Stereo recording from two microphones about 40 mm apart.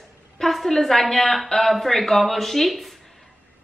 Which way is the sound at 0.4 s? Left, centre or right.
Centre.